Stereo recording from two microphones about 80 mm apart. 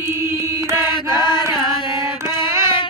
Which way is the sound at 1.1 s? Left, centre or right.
Left.